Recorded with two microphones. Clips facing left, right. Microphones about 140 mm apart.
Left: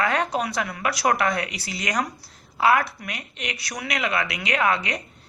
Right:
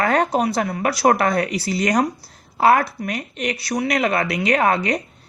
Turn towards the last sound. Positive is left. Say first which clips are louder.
# right 5 dB
turn(degrees=-40)  # may be behind; listen again after turning